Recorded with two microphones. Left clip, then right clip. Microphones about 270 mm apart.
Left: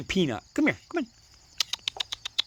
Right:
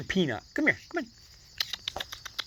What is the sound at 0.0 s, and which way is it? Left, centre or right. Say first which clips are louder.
Speech: left 2 dB; left.